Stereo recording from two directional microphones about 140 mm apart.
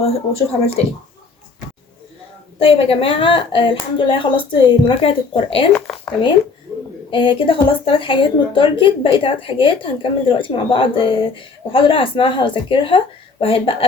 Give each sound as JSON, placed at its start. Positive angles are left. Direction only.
{"t": 0.0, "sound": "speech", "side_deg": 45}
{"t": 2.6, "sound": "a woman's voice", "side_deg": 45}
{"t": 5.7, "sound": "a sound", "side_deg": 5}
{"t": 7.1, "sound": "a woman's voice", "side_deg": 35}